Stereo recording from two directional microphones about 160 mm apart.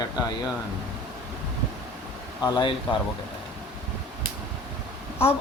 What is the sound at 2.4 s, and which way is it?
Speech, 25° left (ahead or behind).